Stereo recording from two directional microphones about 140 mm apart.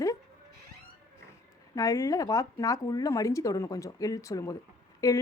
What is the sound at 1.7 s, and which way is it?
A woman's voice, 25° left (ahead or behind).